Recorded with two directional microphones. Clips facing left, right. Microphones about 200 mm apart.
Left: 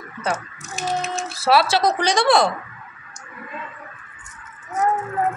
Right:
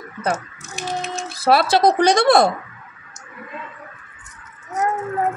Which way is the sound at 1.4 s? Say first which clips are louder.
Right 3 dB; 50° right (ahead or behind).